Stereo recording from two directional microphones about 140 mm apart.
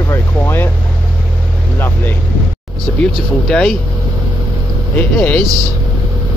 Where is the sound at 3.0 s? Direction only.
5° left (ahead or behind).